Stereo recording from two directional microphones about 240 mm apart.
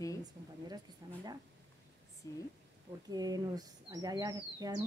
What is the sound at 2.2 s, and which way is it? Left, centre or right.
Speech, centre.